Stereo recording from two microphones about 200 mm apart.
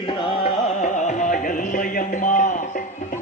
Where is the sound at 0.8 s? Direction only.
40° left (ahead or behind).